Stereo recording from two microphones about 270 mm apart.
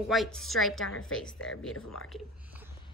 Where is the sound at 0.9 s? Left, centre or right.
Left.